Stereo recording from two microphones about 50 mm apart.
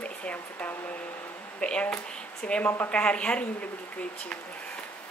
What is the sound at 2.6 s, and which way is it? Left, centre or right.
Speech, left.